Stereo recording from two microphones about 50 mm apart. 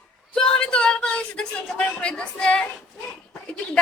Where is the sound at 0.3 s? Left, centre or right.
Centre.